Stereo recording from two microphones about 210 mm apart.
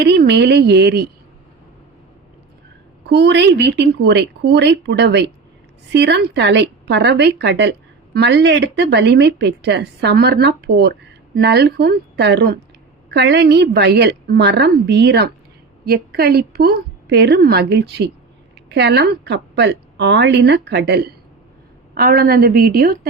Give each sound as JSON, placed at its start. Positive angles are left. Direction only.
{"t": 0.0, "sound": "speech", "side_deg": -50}
{"t": 3.0, "sound": "a woman's voice", "side_deg": -55}